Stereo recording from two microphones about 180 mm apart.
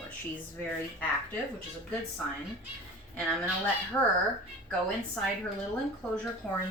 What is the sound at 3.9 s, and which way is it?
Speech, 10° left (ahead or behind).